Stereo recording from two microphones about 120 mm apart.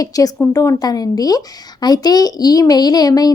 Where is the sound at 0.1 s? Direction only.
30° left (ahead or behind).